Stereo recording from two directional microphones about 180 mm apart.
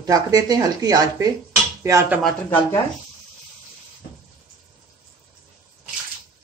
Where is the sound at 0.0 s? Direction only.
20° right (ahead or behind).